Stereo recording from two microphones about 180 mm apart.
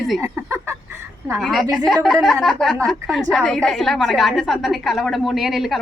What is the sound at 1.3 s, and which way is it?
A woman's voice, centre (ahead or behind).